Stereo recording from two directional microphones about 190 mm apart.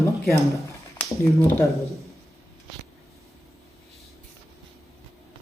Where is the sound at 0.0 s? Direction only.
15° left (ahead or behind).